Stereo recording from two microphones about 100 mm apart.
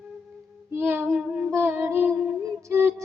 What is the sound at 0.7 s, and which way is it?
Child singing, 20° right (ahead or behind).